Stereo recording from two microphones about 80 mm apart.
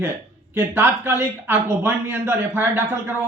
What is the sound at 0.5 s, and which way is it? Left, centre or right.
A man's voice, right.